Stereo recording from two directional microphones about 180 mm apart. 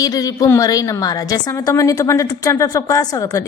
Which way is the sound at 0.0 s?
20° left (ahead or behind).